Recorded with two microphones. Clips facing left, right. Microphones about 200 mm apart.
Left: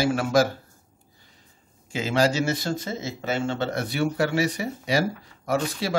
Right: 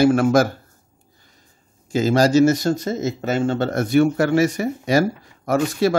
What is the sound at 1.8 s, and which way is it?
Speech, 40° right (ahead or behind).